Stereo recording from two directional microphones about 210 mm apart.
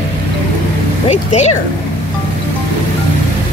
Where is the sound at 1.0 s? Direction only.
30° left (ahead or behind).